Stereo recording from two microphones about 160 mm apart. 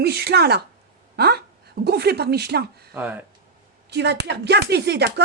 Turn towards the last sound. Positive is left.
turn(degrees=-90)